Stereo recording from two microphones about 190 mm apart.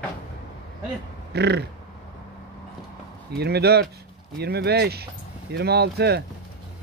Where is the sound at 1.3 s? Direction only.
60° right (ahead or behind).